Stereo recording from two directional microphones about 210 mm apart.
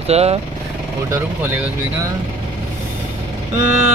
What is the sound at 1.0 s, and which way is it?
Speech, 15° right (ahead or behind).